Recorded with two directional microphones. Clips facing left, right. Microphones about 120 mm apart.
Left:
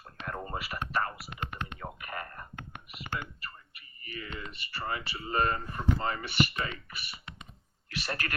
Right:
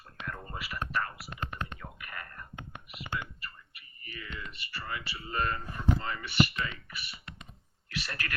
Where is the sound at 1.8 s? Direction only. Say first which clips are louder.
Left 5 dB; 40° left (ahead or behind).